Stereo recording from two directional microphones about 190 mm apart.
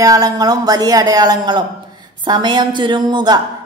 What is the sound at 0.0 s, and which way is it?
A woman's voice, 20° right (ahead or behind).